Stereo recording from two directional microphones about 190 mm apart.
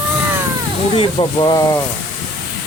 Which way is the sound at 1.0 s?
25° left (ahead or behind).